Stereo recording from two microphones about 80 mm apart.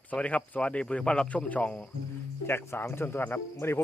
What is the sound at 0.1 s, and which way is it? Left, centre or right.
Speech, centre.